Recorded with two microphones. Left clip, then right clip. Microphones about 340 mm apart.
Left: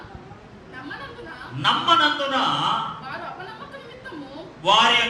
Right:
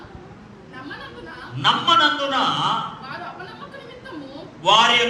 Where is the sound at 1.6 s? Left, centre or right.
Right.